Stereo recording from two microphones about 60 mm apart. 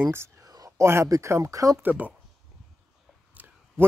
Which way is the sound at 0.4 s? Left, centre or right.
Right.